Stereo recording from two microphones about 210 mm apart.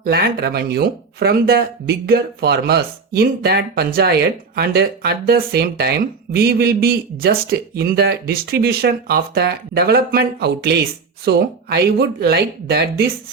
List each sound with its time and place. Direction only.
0.0 s a man's voice: 50° right (ahead or behind)